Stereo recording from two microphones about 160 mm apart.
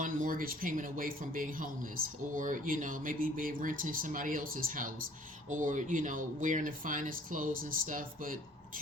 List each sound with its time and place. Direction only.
0.0 s speech: 55° right (ahead or behind)